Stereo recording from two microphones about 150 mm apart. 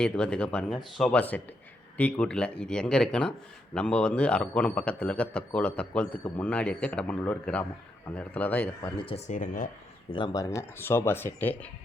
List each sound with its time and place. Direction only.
0.0 s a man's voice: 5° left (ahead or behind)
9.0 s speech: 40° left (ahead or behind); by 9.6 s 60° left (ahead or behind)
10.1 s a man's voice: 35° left (ahead or behind); by 11.7 s 10° left (ahead or behind)